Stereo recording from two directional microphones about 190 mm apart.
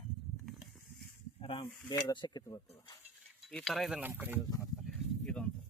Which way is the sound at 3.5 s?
Centre (ahead or behind).